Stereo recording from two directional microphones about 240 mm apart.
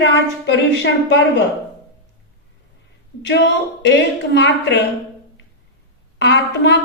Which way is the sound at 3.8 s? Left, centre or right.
Left.